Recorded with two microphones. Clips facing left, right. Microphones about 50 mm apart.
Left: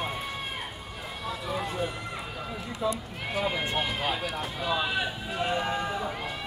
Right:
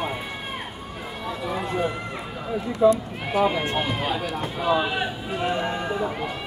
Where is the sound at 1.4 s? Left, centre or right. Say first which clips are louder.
Right 6 dB; centre.